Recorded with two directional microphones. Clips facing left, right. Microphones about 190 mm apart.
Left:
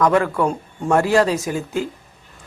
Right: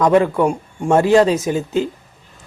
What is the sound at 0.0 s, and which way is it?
Speech, 20° right (ahead or behind).